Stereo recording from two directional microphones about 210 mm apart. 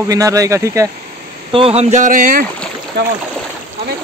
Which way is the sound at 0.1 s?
15° right (ahead or behind).